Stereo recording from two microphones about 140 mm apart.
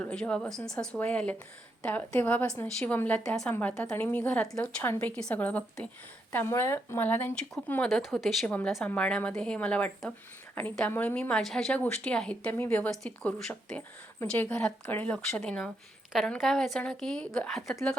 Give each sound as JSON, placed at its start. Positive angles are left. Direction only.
{"t": 0.0, "sound": "a woman's voice", "side_deg": 5}
{"t": 7.9, "sound": "speech", "side_deg": 0}
{"t": 8.4, "sound": "a woman's voice", "side_deg": 10}